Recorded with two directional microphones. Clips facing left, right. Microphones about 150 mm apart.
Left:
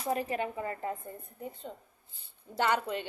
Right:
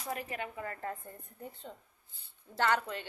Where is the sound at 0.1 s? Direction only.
30° left (ahead or behind).